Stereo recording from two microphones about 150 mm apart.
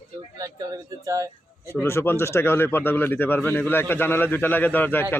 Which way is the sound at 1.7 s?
15° left (ahead or behind).